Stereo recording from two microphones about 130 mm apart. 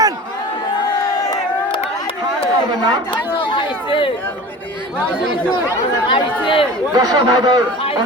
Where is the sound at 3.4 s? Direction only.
40° left (ahead or behind).